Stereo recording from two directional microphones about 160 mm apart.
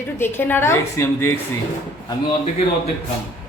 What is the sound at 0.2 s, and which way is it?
Speech, 15° left (ahead or behind).